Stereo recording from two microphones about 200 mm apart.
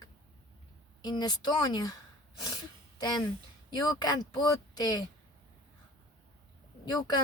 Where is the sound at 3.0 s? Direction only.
20° left (ahead or behind).